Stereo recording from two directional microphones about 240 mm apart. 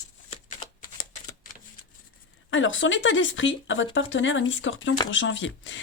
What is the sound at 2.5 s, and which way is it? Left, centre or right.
Speech, left.